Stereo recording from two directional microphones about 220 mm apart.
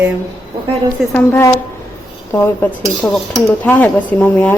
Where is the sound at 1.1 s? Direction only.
10° left (ahead or behind).